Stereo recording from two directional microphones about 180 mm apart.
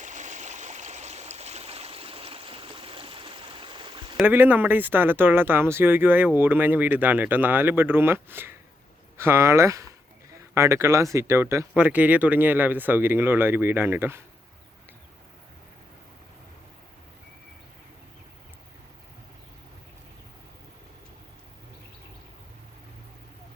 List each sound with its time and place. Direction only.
0.0 s stream: 40° right (ahead or behind)
4.2 s speech: 10° right (ahead or behind)